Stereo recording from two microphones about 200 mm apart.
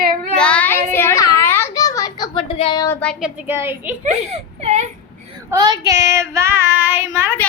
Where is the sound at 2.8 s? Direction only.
10° left (ahead or behind); by 3.9 s 10° right (ahead or behind).